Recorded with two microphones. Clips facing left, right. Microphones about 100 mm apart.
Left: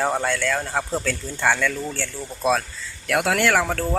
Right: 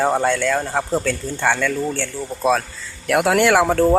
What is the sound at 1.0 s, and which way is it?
Speech, centre (ahead or behind).